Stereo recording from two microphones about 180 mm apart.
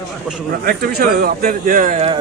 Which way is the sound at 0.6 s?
55° right (ahead or behind).